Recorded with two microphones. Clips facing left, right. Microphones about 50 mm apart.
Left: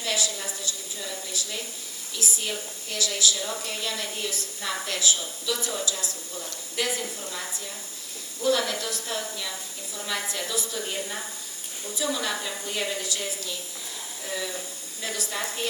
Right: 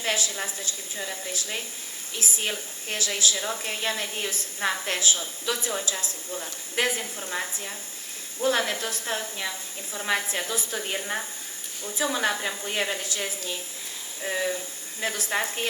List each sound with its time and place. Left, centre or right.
0.0 s a woman's voice: right